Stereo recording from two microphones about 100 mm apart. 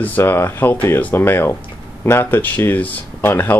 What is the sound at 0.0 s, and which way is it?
Speech, 20° left (ahead or behind).